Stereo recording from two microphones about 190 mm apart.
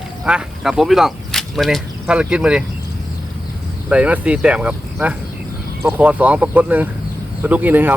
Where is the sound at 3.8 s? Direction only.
5° right (ahead or behind).